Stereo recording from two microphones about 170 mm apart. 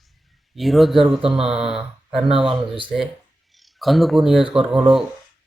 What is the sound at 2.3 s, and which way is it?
Speech, 30° right (ahead or behind).